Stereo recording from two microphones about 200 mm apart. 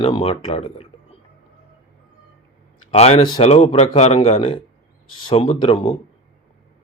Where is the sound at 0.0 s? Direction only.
30° left (ahead or behind).